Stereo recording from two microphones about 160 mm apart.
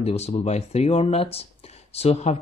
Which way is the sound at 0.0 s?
40° left (ahead or behind).